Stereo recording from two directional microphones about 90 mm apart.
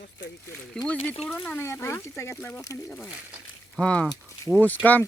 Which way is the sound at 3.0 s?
15° right (ahead or behind).